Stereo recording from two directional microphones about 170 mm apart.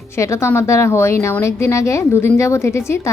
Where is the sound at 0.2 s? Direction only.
15° left (ahead or behind).